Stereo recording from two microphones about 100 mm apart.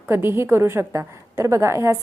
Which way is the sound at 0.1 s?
25° right (ahead or behind).